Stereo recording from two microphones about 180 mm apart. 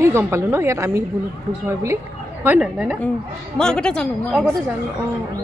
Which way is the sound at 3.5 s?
5° left (ahead or behind).